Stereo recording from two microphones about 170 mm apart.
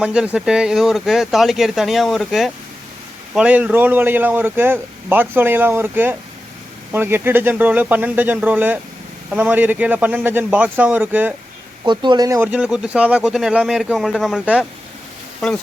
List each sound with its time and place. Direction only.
0.0 s a man's voice: 5° right (ahead or behind)
11.9 s speech: 25° right (ahead or behind)
12.4 s speech: 5° right (ahead or behind)